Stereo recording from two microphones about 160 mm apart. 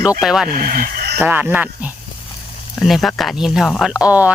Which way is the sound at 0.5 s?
60° right (ahead or behind).